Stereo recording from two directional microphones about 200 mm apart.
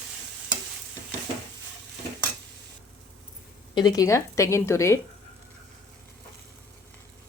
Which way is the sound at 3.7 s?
20° left (ahead or behind).